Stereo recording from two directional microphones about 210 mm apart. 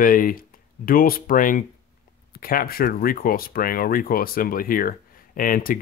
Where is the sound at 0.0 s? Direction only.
40° left (ahead or behind).